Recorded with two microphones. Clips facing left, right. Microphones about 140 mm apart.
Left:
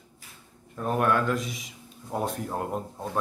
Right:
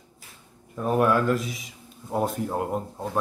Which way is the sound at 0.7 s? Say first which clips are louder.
Right 3 dB; 5° right (ahead or behind).